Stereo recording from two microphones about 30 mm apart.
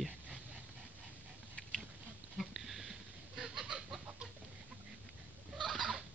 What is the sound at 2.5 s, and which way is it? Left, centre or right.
Fowl, centre.